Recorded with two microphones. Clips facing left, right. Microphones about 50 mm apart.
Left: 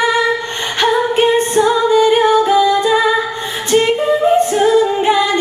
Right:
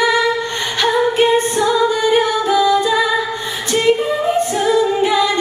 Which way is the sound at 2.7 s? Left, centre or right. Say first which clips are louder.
Left 1 dB; left.